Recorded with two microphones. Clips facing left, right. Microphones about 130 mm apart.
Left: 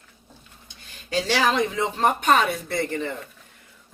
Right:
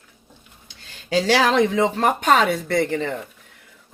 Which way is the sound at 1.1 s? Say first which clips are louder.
Right 5 dB; 90° right.